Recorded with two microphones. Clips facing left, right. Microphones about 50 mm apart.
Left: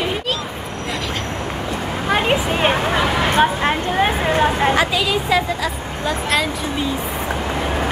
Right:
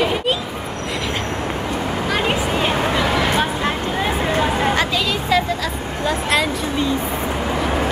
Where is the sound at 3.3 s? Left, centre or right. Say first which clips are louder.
Left 4 dB; left.